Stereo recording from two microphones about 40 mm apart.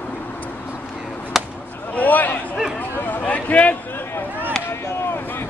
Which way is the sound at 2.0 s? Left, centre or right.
Left.